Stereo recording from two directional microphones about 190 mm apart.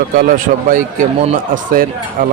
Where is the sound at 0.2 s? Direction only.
45° right (ahead or behind).